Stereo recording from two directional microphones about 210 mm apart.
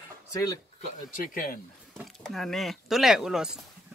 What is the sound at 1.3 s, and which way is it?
Speech, 40° left (ahead or behind).